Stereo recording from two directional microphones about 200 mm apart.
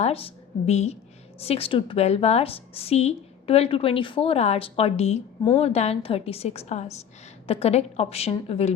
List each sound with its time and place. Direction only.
0.0 s a woman's voice: 30° left (ahead or behind)